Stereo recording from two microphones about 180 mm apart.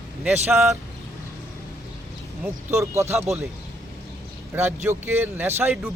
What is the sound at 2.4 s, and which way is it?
Speech, 15° right (ahead or behind).